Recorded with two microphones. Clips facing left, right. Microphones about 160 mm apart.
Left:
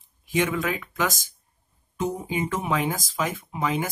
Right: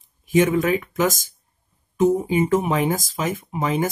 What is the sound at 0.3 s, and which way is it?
Speech, 45° right (ahead or behind).